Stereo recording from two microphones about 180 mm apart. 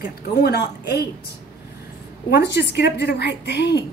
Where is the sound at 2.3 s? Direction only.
70° left (ahead or behind).